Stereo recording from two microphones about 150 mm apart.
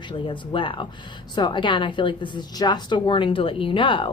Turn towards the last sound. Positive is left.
turn(degrees=35)  # may be behind; listen again after turning